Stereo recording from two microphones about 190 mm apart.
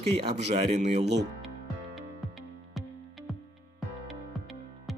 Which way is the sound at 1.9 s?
Centre (ahead or behind).